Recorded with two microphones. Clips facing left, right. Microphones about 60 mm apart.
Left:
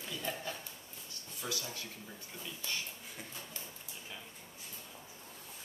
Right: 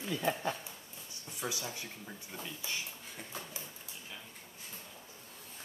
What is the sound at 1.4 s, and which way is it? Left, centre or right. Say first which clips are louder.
Speech: right 2 dB; right.